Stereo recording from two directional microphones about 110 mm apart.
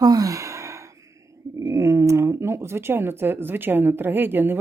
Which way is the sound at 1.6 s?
30° right (ahead or behind).